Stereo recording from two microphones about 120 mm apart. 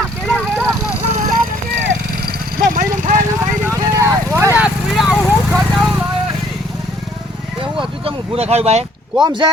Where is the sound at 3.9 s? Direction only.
25° right (ahead or behind).